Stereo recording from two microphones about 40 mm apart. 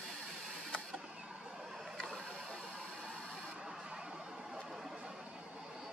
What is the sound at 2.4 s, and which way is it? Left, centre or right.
Engine, centre.